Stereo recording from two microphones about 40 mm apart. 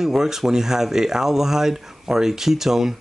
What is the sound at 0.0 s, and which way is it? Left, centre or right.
Speech, centre.